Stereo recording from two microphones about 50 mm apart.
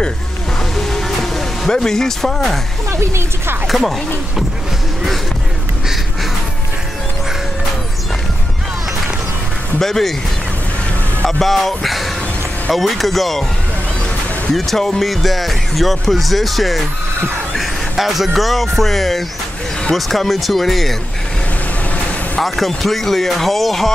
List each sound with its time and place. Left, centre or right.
0.7 s music: centre
2.9 s speech: right
3.6 s speech: centre
9.8 s speech: centre
11.2 s speech: centre
14.5 s speech: centre
22.4 s speech: centre